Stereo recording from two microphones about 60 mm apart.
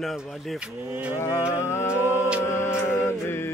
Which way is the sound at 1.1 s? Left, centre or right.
Left.